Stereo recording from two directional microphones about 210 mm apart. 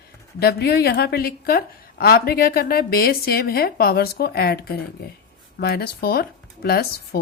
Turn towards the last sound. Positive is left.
turn(degrees=50)  # may be behind; listen again after turning